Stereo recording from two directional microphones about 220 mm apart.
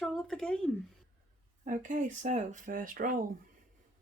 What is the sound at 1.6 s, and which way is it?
Speech, 35° right (ahead or behind).